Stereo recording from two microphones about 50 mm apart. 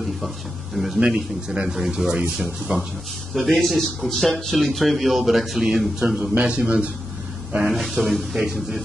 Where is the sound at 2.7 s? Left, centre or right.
Right.